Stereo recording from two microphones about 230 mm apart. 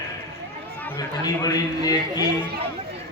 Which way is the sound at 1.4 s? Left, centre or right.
Centre.